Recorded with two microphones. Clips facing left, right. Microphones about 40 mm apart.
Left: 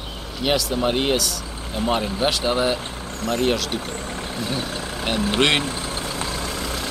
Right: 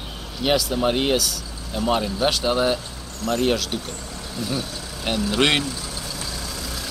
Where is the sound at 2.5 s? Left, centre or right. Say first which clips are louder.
Right 1 dB; left.